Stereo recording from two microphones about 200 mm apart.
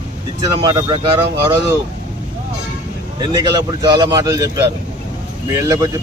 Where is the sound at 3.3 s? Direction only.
20° right (ahead or behind).